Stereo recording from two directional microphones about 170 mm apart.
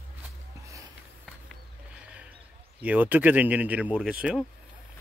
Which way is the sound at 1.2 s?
5° right (ahead or behind).